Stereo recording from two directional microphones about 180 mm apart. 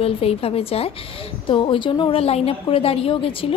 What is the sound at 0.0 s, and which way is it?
A woman's voice, 35° left (ahead or behind).